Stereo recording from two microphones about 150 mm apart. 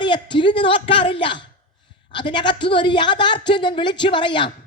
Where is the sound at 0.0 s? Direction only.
30° left (ahead or behind).